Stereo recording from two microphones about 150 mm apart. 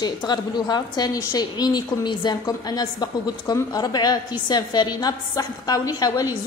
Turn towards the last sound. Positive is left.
turn(degrees=25)  # may be behind; listen again after turning